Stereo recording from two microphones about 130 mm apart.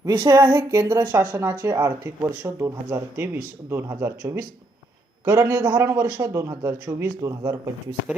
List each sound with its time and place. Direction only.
0.0 s speech: 30° right (ahead or behind)